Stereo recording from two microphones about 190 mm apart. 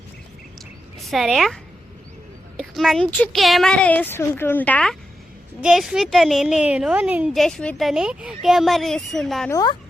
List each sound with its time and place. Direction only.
1.1 s a woman's voice: centre (ahead or behind)
2.6 s a woman's voice: centre (ahead or behind)
9.5 s speech: 20° left (ahead or behind)